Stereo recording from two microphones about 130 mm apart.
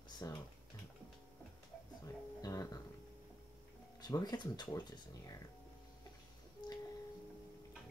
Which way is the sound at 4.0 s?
30° left (ahead or behind).